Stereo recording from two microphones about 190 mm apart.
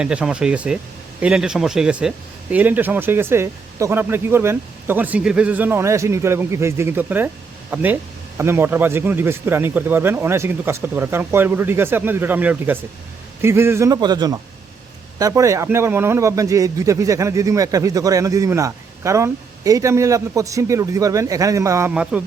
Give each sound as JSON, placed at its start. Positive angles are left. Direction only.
{"t": 0.0, "sound": "a man's voice", "side_deg": -5}